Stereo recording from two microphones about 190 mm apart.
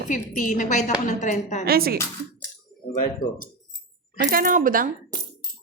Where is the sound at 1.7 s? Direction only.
55° right (ahead or behind).